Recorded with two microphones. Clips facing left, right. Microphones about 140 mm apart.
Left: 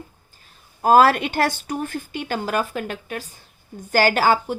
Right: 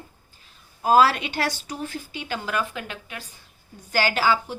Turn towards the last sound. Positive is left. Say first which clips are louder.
# left 5 dB
turn(degrees=45)  # may be behind; listen again after turning